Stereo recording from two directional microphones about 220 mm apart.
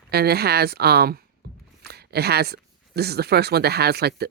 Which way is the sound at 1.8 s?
45° right (ahead or behind).